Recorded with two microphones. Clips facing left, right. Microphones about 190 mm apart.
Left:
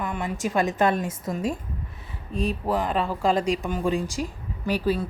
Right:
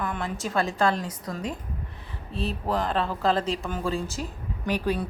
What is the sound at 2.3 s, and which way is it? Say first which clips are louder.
A woman's voice: left 3 dB; 10° left (ahead or behind).